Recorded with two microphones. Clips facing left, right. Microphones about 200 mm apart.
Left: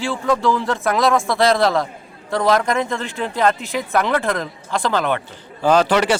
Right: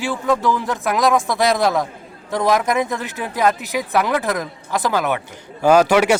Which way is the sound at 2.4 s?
15° right (ahead or behind).